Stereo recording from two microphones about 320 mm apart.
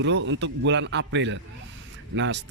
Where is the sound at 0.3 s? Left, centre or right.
Right.